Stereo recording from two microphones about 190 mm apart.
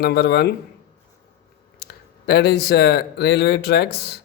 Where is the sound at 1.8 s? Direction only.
60° left (ahead or behind).